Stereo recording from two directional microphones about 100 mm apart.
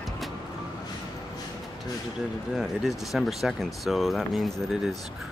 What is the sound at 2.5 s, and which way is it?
Speech, 5° right (ahead or behind).